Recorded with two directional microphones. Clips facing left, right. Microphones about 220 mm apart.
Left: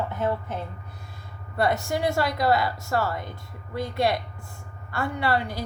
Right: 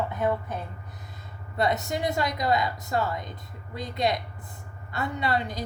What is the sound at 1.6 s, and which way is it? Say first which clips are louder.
A woman's voice: left 2 dB; 20° right (ahead or behind).